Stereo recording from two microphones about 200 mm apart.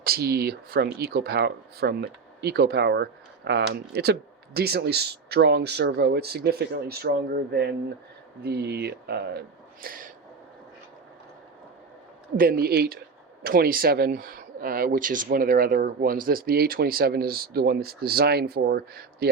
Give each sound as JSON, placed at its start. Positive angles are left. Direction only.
{"t": 0.0, "sound": "speech", "side_deg": -50}
{"t": 12.4, "sound": "speech", "side_deg": -50}